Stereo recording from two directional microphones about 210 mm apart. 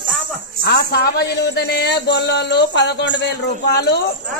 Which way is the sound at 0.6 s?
50° left (ahead or behind).